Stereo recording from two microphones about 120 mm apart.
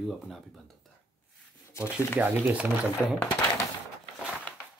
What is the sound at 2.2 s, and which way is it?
Speech, 15° right (ahead or behind).